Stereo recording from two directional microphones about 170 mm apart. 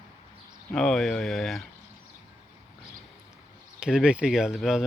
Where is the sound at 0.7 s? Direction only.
5° left (ahead or behind).